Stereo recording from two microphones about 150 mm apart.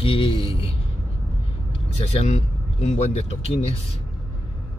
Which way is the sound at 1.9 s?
45° left (ahead or behind).